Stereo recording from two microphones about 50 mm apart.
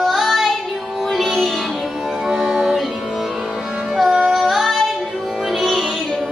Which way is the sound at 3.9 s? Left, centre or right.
Centre.